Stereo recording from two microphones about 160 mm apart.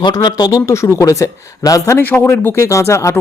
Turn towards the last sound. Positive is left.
turn(degrees=20)  # may be behind; listen again after turning